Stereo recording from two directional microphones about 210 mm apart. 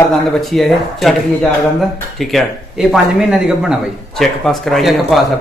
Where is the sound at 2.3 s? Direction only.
Centre (ahead or behind).